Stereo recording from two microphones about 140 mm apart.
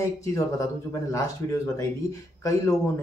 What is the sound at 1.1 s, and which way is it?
Speech, 25° left (ahead or behind).